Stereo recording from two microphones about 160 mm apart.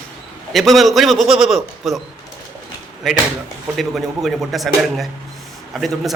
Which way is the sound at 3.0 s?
Centre (ahead or behind).